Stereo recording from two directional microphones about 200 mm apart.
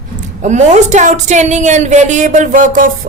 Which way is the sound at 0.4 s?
35° right (ahead or behind).